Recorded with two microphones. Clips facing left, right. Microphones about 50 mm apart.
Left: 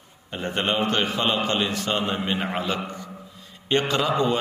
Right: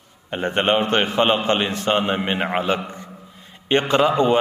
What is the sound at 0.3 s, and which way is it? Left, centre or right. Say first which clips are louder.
A man's voice: right 6 dB; right.